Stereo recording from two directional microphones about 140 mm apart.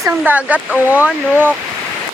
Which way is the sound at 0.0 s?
15° right (ahead or behind).